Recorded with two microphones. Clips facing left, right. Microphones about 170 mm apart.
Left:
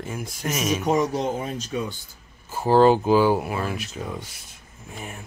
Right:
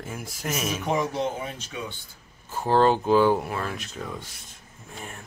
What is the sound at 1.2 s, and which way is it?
Speech, 40° left (ahead or behind).